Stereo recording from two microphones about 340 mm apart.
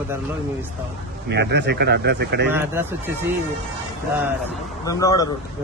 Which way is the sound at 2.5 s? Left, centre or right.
Centre.